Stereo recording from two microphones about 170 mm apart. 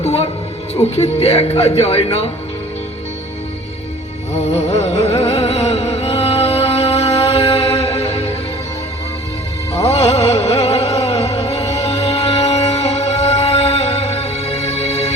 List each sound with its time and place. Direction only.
0.0 s music: 35° left (ahead or behind)
0.9 s a man's voice: 40° left (ahead or behind)
4.4 s music: 40° left (ahead or behind)
9.8 s music: 35° left (ahead or behind)